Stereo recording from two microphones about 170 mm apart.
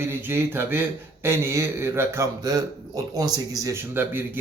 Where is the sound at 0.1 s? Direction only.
15° right (ahead or behind).